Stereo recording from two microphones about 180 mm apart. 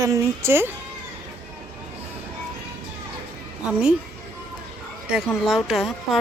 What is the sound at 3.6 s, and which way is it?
Speech, 5° right (ahead or behind).